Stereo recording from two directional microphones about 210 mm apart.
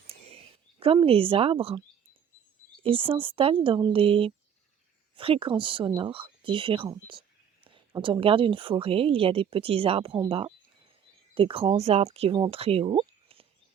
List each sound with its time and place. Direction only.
0.8 s speech: 25° right (ahead or behind)
2.8 s speech: 25° right (ahead or behind)